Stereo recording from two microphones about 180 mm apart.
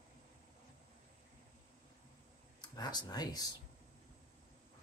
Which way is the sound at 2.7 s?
20° left (ahead or behind).